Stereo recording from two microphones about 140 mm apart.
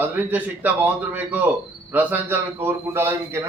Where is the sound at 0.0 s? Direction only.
10° right (ahead or behind).